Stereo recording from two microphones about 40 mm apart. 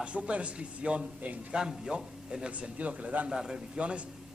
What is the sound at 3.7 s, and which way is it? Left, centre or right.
Speech, right.